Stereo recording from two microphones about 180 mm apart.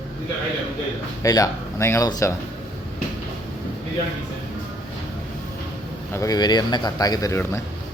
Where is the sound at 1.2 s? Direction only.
20° left (ahead or behind).